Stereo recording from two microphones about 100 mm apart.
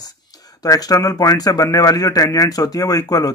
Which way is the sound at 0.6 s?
40° left (ahead or behind).